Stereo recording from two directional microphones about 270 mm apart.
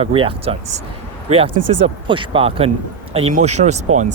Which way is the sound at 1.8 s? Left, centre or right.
Centre.